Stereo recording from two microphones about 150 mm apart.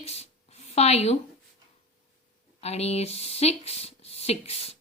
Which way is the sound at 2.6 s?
45° left (ahead or behind).